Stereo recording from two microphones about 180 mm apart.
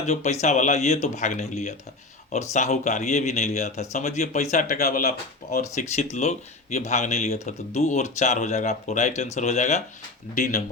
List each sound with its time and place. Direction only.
0.0 s speech: 40° left (ahead or behind)